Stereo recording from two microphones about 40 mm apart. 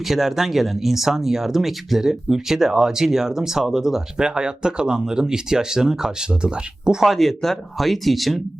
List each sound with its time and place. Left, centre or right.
0.0 s speech: centre
4.2 s speech: right
7.0 s speech: centre